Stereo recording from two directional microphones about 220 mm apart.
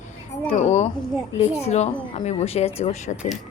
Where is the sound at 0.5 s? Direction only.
30° left (ahead or behind).